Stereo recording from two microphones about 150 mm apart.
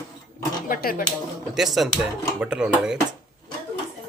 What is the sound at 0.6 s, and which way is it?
Speech, 75° left (ahead or behind).